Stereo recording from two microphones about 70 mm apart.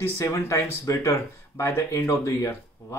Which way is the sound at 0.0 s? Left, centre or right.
Left.